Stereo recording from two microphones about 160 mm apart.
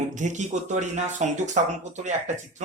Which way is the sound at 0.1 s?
50° right (ahead or behind).